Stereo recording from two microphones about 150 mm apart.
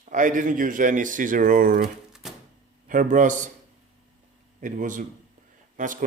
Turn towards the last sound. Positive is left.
turn(degrees=-60)  # may be behind; listen again after turning